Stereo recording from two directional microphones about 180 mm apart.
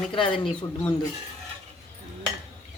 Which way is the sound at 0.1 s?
30° left (ahead or behind).